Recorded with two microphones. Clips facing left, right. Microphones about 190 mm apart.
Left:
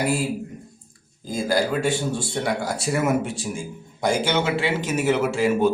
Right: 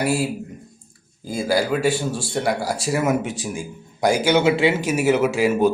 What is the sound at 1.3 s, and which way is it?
A man's voice, 5° right (ahead or behind).